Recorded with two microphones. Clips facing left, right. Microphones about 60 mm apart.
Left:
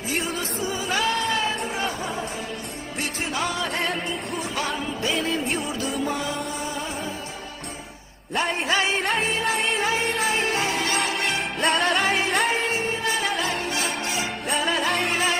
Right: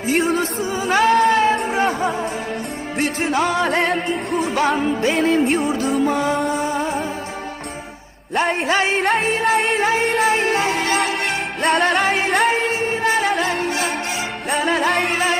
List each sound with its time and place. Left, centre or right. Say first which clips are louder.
0.1 s music: right 10 dB; right
3.7 s music: right 7 dB; right
8.4 s music: right 5 dB; right
9.0 s music: right 6 dB; right
11.0 s music: right 4 dB; right